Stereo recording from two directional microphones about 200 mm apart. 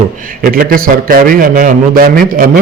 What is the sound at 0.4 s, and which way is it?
A man's voice, 45° right (ahead or behind).